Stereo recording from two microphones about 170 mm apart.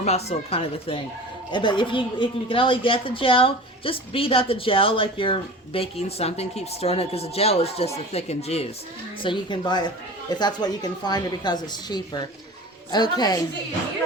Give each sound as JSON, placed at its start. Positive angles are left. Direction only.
{"t": 0.0, "sound": "speech", "side_deg": 40}